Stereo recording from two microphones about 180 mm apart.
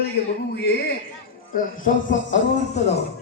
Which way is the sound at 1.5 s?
50° left (ahead or behind).